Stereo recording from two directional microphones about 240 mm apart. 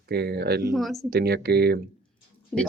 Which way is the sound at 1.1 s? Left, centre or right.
Right.